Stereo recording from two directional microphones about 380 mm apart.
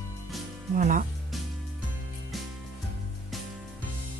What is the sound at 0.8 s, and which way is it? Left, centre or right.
Speech, centre.